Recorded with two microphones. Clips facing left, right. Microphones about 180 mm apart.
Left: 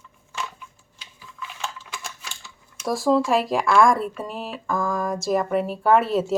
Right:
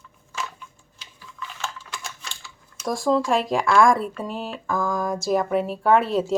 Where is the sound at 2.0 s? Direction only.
Centre (ahead or behind).